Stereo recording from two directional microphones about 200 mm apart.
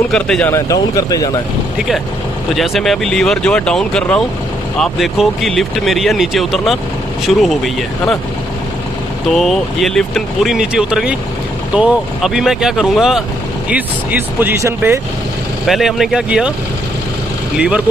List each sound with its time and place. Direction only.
0.1 s speech: 5° left (ahead or behind)
2.5 s speech: centre (ahead or behind)
9.3 s speech: centre (ahead or behind)
14.4 s speech: 10° right (ahead or behind)
15.6 s speech: centre (ahead or behind)
17.6 s speech: 5° right (ahead or behind)